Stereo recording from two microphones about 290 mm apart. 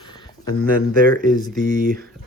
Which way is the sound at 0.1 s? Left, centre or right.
Centre.